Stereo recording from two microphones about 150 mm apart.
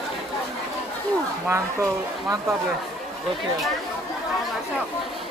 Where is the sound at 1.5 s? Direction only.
20° right (ahead or behind).